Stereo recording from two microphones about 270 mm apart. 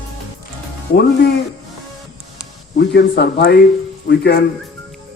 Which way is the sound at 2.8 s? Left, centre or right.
Left.